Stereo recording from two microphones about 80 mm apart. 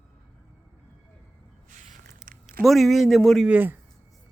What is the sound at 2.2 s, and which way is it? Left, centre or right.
Speech, centre.